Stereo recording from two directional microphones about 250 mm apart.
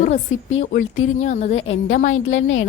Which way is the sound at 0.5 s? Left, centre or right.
Left.